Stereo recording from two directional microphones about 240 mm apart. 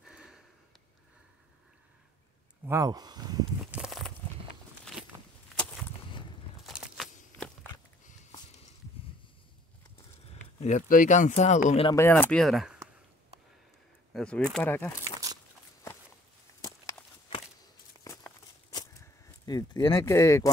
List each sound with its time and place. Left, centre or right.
0.0 s sniff: centre
2.6 s speech: centre
3.7 s speech: centre
5.0 s walk: centre
6.6 s walk: centre
10.6 s speech: left
11.9 s speech: centre
14.1 s a sound: centre
14.5 s speech: centre
16.6 s a sound: centre